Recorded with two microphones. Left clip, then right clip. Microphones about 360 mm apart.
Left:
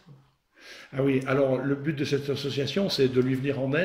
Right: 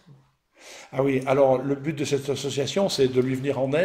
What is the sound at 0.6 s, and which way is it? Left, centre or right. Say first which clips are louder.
A man's voice: right 3 dB; centre.